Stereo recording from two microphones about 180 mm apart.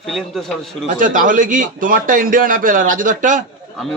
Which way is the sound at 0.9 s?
50° right (ahead or behind).